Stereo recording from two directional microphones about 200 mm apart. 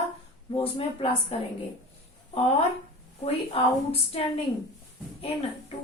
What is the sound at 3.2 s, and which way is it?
A woman's voice, 30° left (ahead or behind).